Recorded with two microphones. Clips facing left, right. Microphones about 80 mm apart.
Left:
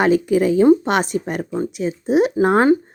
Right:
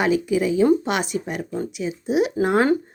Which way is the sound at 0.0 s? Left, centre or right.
Left.